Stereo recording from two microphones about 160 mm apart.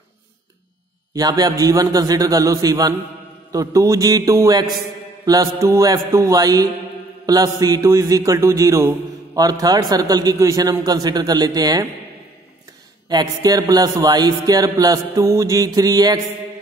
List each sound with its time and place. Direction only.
1.1 s a man's voice: 25° right (ahead or behind)
13.1 s a man's voice: 25° right (ahead or behind)